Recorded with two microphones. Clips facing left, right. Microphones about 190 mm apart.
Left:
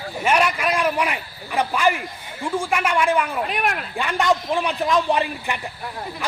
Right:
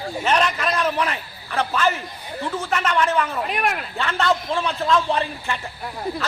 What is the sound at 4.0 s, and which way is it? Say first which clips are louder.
A man's voice: left 1 dB; 15° left (ahead or behind).